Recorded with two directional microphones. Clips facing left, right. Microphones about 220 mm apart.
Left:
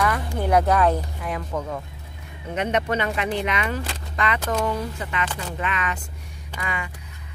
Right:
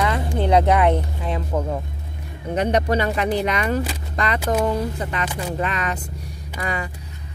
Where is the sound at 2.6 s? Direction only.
35° right (ahead or behind).